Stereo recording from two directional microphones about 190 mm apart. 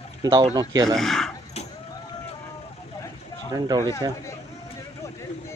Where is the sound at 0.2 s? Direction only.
20° right (ahead or behind).